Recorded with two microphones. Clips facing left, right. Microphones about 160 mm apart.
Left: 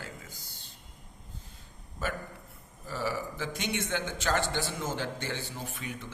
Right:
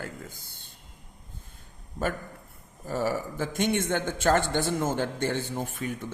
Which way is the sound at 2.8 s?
50° right (ahead or behind).